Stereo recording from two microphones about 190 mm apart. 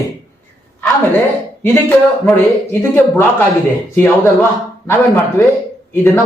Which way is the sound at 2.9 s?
10° left (ahead or behind).